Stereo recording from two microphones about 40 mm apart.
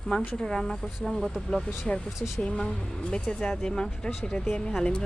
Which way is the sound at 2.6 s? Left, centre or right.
Left.